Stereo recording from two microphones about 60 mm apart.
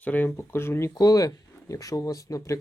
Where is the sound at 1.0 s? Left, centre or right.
Left.